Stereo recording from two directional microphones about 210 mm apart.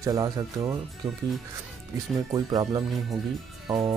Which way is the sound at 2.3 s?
20° right (ahead or behind).